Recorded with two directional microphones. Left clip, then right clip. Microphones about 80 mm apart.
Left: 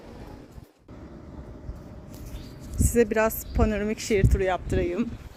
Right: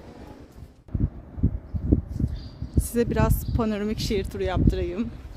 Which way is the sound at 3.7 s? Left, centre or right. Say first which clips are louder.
Left 1 dB; right.